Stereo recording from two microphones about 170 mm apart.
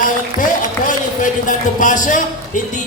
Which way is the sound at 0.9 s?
50° left (ahead or behind).